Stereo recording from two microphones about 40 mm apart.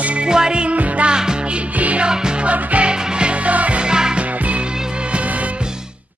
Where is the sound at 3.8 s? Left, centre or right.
Centre.